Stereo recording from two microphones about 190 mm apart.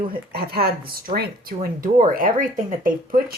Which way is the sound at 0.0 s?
50° right (ahead or behind).